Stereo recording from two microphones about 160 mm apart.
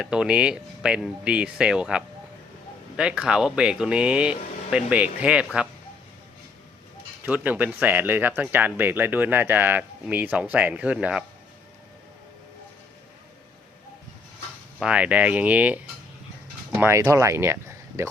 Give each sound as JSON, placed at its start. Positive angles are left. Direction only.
{"t": 0.0, "sound": "speech", "side_deg": -5}
{"t": 7.3, "sound": "speech", "side_deg": -10}
{"t": 14.8, "sound": "speech", "side_deg": -5}
{"t": 16.8, "sound": "speech", "side_deg": -15}